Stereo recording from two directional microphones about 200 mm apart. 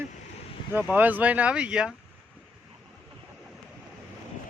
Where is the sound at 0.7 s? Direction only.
10° right (ahead or behind).